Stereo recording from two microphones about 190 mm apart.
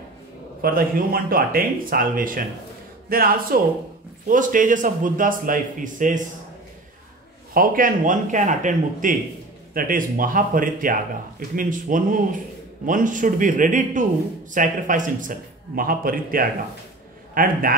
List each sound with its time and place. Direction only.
0.6 s speech: 50° right (ahead or behind)
7.5 s a man's voice: 45° right (ahead or behind)